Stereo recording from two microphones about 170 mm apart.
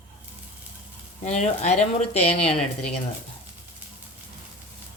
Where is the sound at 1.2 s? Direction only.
40° left (ahead or behind).